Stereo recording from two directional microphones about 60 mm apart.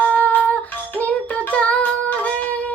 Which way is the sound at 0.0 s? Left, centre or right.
Left.